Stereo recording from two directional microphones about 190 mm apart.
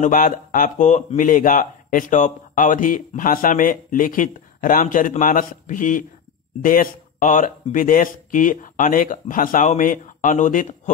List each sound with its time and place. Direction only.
0.0 s speech: 45° left (ahead or behind)